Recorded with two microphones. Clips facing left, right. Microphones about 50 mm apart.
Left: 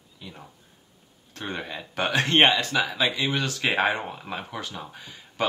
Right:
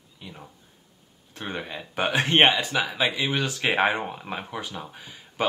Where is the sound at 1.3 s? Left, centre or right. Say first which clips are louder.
Even; centre.